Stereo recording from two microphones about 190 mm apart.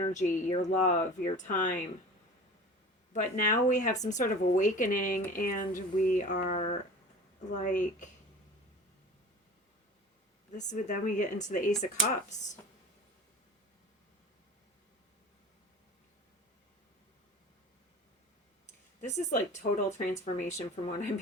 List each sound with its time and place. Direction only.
0.0 s speech: 40° left (ahead or behind)
3.1 s speech: 40° left (ahead or behind)
10.6 s speech: 40° left (ahead or behind)
18.9 s speech: 40° left (ahead or behind)